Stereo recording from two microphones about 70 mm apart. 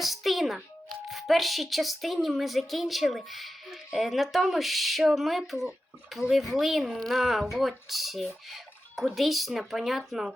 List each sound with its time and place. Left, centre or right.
0.0 s music: centre
1.0 s speech: centre